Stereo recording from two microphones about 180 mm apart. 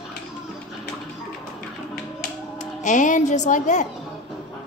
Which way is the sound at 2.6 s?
45° left (ahead or behind).